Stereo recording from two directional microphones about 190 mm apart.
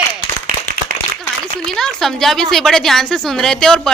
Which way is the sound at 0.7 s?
50° right (ahead or behind).